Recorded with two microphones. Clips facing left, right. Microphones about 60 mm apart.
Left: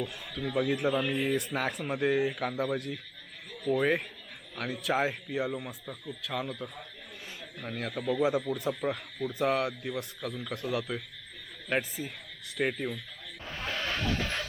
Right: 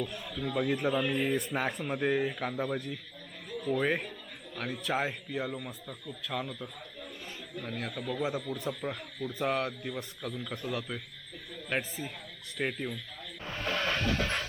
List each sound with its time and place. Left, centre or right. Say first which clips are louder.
0.0 s speech: even; centre
8.0 s speech: left 7 dB; centre
11.8 s speech: left 2 dB; centre
13.7 s music: right 1 dB; right